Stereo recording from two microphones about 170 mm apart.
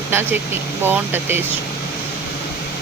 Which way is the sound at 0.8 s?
10° right (ahead or behind).